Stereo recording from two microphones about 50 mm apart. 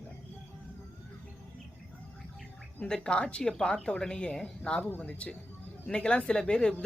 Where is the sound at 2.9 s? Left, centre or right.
Centre.